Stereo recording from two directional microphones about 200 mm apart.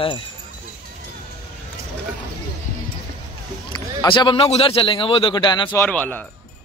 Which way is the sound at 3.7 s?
20° left (ahead or behind).